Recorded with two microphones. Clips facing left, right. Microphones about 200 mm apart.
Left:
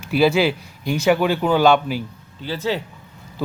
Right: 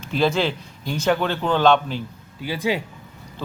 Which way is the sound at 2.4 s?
15° right (ahead or behind).